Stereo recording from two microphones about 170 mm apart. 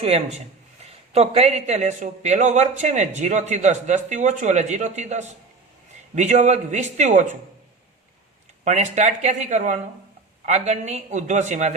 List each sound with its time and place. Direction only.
0.0 s speech: 40° right (ahead or behind)
8.6 s speech: 40° right (ahead or behind)